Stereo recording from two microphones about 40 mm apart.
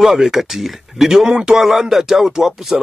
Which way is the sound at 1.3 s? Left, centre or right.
Centre.